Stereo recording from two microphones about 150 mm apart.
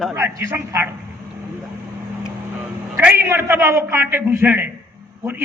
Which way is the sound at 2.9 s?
15° right (ahead or behind).